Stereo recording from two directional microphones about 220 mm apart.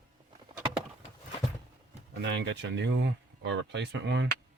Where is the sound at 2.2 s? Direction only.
55° right (ahead or behind).